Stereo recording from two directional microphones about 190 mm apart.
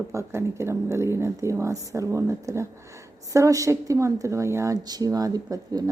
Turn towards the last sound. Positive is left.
turn(degrees=-20)  # may be behind; listen again after turning